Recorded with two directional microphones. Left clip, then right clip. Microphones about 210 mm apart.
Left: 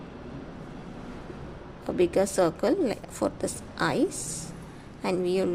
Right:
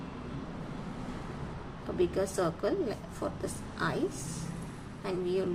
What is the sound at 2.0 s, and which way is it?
A woman's voice, 40° left (ahead or behind).